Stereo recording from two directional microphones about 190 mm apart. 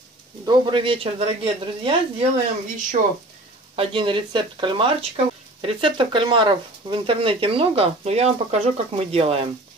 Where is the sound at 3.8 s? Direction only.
25° right (ahead or behind).